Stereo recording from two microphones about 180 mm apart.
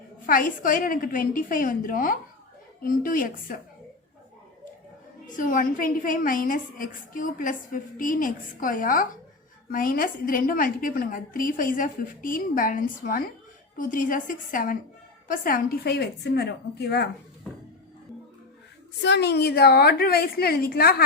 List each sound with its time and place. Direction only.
0.3 s a woman's voice: 50° left (ahead or behind)
5.3 s a woman's voice: 45° left (ahead or behind); by 17.1 s 65° left (ahead or behind)
19.0 s a woman's voice: 70° left (ahead or behind)